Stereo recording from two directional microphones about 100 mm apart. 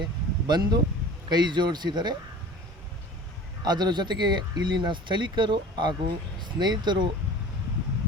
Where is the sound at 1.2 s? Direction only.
45° right (ahead or behind).